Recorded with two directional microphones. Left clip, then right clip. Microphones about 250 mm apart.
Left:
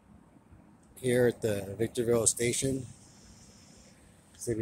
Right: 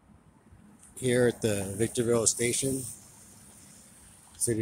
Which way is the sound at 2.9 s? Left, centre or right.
Right.